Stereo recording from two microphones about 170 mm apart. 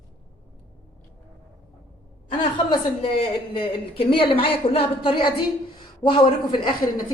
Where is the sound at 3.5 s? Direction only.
35° left (ahead or behind).